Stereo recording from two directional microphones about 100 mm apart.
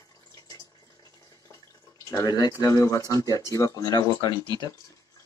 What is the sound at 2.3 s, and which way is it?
Speech, 40° left (ahead or behind).